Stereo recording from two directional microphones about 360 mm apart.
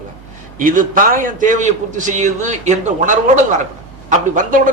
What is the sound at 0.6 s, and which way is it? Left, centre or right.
A man's voice, right.